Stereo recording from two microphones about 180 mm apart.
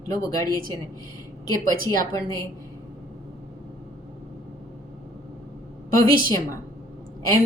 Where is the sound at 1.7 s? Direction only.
20° left (ahead or behind).